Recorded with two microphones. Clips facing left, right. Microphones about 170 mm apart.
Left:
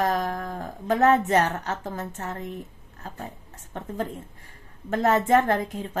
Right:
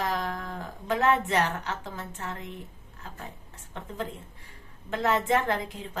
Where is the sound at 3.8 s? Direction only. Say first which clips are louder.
Left 6 dB; 45° left (ahead or behind).